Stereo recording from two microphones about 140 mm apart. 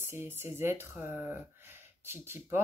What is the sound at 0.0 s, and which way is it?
Speech, 20° right (ahead or behind).